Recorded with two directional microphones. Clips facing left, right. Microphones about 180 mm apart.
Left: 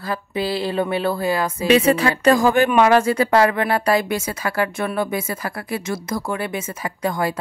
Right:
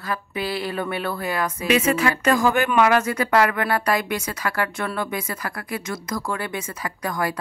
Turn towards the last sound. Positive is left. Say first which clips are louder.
# left 3 dB
turn(degrees=25)  # may be behind; listen again after turning